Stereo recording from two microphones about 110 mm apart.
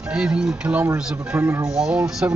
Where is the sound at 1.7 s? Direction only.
5° right (ahead or behind).